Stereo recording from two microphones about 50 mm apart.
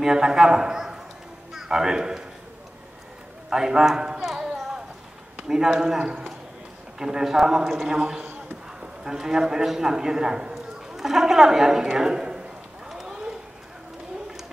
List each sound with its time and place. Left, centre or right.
0.0 s a man's voice: centre
3.4 s a sound: centre
5.5 s a man's voice: centre
5.9 s a man's voice: right
7.0 s a man's voice: centre
12.8 s run: centre